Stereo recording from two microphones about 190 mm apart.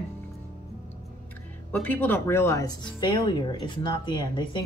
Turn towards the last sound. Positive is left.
turn(degrees=25)  # may be behind; listen again after turning